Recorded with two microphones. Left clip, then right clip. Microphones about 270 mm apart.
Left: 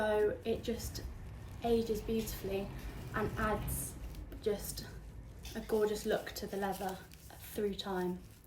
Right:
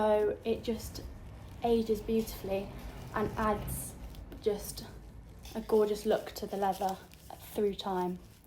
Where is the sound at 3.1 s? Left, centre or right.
Centre.